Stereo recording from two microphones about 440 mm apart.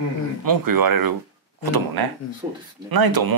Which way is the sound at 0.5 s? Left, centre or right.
Right.